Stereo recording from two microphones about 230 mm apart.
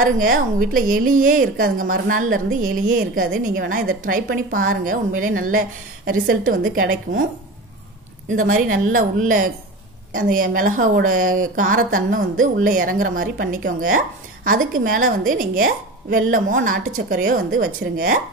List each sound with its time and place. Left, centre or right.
0.0 s speech: right
8.4 s speech: right